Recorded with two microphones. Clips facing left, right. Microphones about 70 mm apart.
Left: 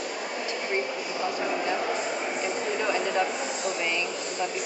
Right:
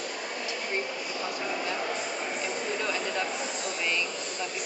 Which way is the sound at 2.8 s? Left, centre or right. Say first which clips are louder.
Left 7 dB; centre.